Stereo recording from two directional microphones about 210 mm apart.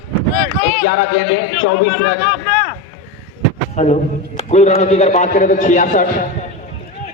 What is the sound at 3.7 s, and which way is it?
A man's voice, 30° left (ahead or behind).